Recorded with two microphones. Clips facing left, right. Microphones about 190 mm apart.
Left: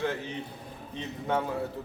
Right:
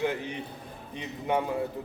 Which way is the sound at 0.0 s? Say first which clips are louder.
Right 2 dB; 15° right (ahead or behind).